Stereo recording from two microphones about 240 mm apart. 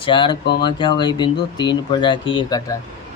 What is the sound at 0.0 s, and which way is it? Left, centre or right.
Speech, centre.